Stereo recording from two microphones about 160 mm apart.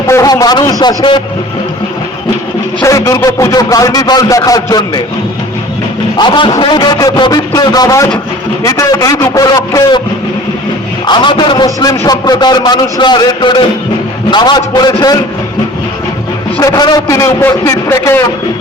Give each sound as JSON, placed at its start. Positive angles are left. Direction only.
{"t": 0.1, "sound": "a man's voice", "side_deg": 20}
{"t": 2.8, "sound": "a man's voice", "side_deg": 20}
{"t": 6.1, "sound": "a man's voice", "side_deg": 30}
{"t": 11.0, "sound": "a man's voice", "side_deg": 30}
{"t": 16.6, "sound": "a man's voice", "side_deg": 20}